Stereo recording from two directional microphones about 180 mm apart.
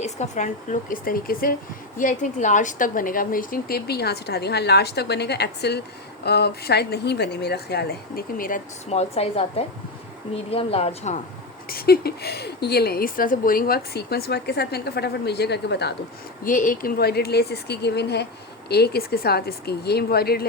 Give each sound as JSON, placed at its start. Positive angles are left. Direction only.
{"t": 0.0, "sound": "a woman's voice", "side_deg": 40}
{"t": 8.9, "sound": "a woman's voice", "side_deg": 35}
{"t": 11.7, "sound": "a woman's voice", "side_deg": 60}
{"t": 16.4, "sound": "a woman's voice", "side_deg": 50}